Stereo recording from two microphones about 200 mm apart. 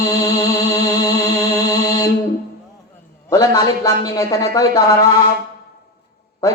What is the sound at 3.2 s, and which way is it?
Speech, 20° left (ahead or behind).